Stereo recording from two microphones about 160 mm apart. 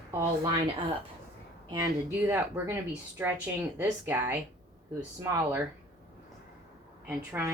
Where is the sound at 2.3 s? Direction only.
15° right (ahead or behind).